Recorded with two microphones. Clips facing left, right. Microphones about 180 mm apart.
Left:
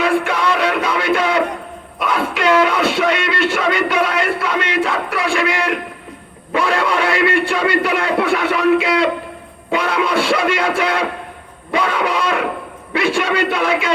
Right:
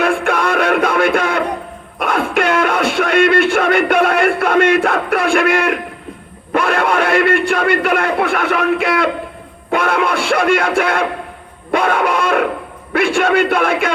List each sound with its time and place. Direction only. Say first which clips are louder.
0.0 s music: right 1 dB; 50° right (ahead or behind)
2.0 s speech: right 3 dB; 50° right (ahead or behind)